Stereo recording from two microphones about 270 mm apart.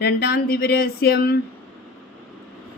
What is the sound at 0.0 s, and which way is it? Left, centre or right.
A woman's voice, left.